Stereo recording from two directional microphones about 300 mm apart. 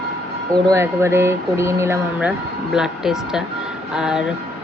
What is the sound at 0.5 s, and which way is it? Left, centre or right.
A woman's voice, centre.